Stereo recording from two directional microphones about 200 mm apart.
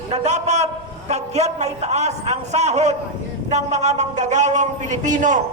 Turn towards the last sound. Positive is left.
turn(degrees=-40)  # may be behind; listen again after turning